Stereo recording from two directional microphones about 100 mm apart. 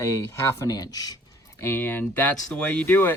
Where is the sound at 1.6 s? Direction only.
20° left (ahead or behind).